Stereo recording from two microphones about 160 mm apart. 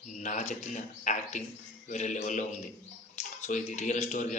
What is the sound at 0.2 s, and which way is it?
A man's voice, 45° left (ahead or behind).